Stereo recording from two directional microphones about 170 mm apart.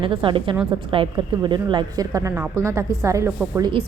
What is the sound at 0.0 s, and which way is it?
A woman's voice, 30° right (ahead or behind).